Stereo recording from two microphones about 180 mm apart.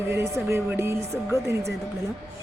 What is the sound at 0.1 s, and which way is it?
A woman's voice, 15° right (ahead or behind).